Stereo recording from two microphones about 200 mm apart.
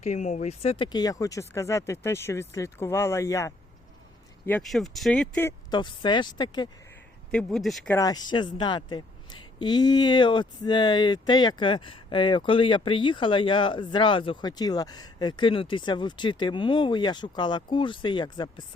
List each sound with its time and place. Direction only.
0.0 s speech: 35° left (ahead or behind); by 5.5 s 5° left (ahead or behind)
5.7 s a woman's voice: 25° left (ahead or behind)
7.3 s speech: 5° left (ahead or behind)
7.9 s a woman's voice: 20° left (ahead or behind)